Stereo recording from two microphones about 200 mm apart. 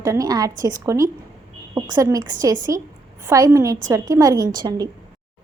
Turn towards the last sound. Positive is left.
turn(degrees=-20)  # may be behind; listen again after turning